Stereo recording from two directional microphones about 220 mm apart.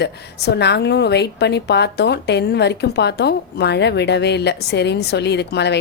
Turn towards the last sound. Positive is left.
turn(degrees=50)  # may be behind; listen again after turning